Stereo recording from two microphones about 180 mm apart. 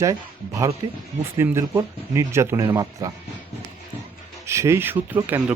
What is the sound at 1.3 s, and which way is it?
Speech, 15° right (ahead or behind).